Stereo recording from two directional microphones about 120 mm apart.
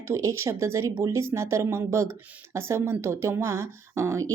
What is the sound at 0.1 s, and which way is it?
Speech, 25° right (ahead or behind).